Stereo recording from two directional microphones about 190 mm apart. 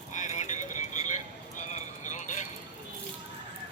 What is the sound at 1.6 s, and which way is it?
Vehicle, 40° left (ahead or behind).